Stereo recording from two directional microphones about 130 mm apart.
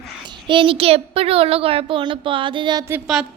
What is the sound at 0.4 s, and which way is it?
A child's voice, 40° right (ahead or behind).